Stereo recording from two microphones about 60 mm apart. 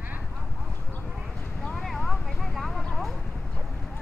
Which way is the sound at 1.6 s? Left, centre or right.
Centre.